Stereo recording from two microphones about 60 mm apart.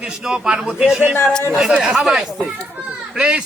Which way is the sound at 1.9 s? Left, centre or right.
Centre.